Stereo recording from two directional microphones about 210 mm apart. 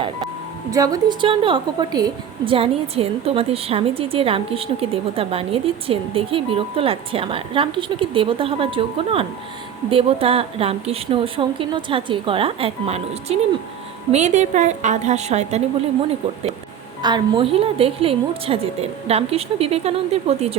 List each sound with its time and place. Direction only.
0.7 s a woman's voice: 15° right (ahead or behind)
17.0 s a woman's voice: 20° right (ahead or behind)